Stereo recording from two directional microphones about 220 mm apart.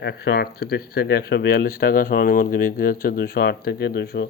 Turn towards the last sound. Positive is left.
turn(degrees=50)  # may be behind; listen again after turning